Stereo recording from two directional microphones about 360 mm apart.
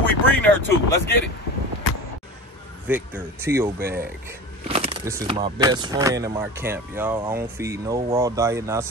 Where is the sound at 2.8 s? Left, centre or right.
Centre.